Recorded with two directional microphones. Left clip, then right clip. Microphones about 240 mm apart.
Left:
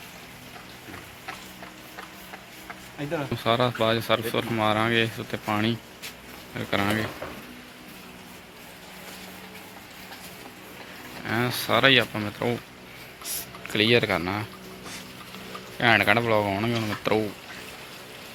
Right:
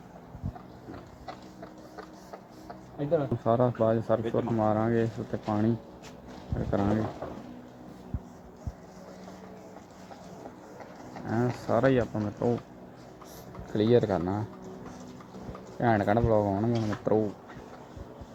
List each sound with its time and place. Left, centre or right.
3.4 s speech: left
11.3 s speech: left
13.7 s speech: left
15.8 s speech: left